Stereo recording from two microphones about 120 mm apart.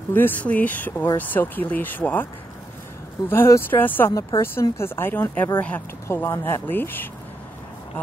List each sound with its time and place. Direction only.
0.1 s speech: 15° left (ahead or behind)
3.3 s speech: 20° left (ahead or behind)